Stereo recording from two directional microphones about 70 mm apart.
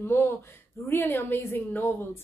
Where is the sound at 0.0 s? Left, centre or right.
Left.